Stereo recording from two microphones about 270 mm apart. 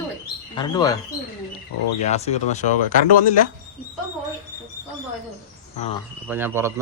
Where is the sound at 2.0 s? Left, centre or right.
Left.